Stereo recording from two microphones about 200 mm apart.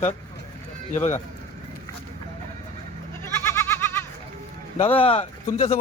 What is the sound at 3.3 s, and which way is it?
Goat, 15° left (ahead or behind).